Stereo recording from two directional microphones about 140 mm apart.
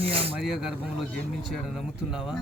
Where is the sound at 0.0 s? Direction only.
45° right (ahead or behind).